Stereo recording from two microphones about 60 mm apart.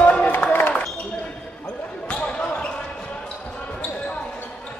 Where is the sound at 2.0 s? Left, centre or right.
Centre.